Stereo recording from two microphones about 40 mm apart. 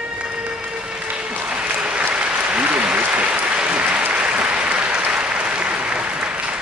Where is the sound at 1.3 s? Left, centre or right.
Right.